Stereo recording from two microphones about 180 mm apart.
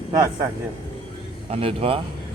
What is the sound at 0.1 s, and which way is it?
Speech, 20° right (ahead or behind).